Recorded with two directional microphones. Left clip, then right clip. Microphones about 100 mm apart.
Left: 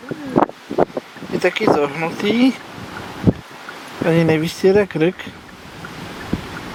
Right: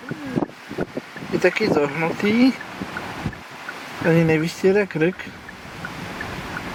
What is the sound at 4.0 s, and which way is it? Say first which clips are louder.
Speech: left 2 dB; 35° left (ahead or behind).